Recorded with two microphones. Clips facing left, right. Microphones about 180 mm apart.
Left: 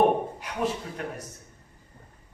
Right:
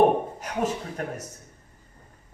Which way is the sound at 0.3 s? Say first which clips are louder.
Right 2 dB; 45° right (ahead or behind).